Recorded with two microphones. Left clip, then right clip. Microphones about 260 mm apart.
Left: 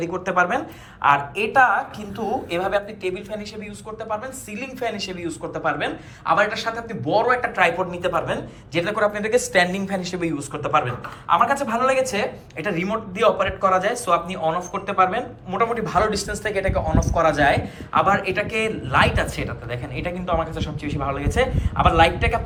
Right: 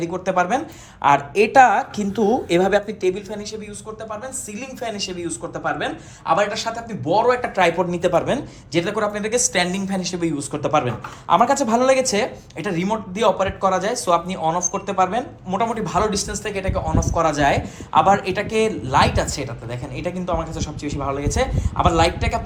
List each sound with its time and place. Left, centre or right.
0.0 s a man's voice: centre
4.1 s a man's voice: centre